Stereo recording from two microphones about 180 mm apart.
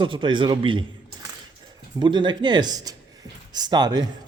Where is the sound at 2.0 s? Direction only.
25° right (ahead or behind).